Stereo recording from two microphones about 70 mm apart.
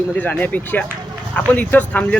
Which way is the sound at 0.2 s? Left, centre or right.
Left.